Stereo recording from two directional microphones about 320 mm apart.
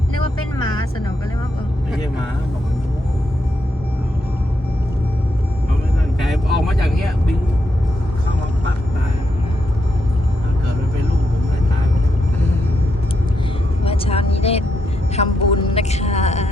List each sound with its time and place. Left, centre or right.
6.1 s vehicle: centre
13.8 s vehicle: centre